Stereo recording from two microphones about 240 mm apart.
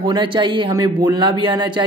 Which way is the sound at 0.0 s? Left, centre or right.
Centre.